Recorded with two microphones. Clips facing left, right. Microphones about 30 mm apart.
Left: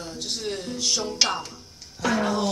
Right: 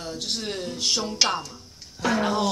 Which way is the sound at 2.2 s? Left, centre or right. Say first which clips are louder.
Right 1 dB; right.